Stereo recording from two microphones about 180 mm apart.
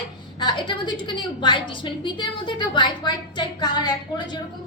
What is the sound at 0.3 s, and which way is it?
A woman's voice, 25° left (ahead or behind).